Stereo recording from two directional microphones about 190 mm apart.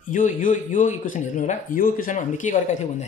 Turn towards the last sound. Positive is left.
turn(degrees=40)  # may be behind; listen again after turning